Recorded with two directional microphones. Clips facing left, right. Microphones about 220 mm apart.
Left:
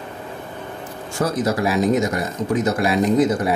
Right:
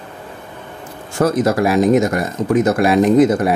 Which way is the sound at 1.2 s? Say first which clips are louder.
Right 6 dB; 55° right (ahead or behind).